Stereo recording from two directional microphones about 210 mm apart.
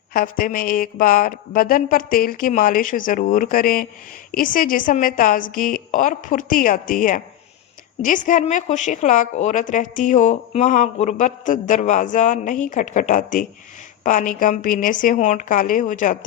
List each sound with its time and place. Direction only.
0.1 s a woman's voice: 40° left (ahead or behind)